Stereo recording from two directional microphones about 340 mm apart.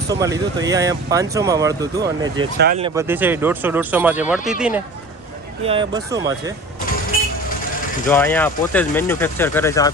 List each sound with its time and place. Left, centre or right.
0.1 s speech: centre
2.6 s speech: right
2.8 s speech: centre
5.6 s speech: centre
8.1 s speech: centre